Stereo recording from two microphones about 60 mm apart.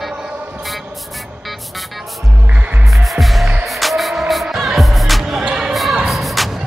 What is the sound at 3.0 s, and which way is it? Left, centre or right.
Music, centre.